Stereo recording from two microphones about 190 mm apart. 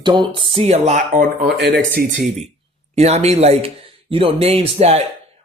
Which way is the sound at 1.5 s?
70° right (ahead or behind).